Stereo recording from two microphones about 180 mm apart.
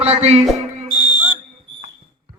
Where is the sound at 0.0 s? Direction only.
35° right (ahead or behind).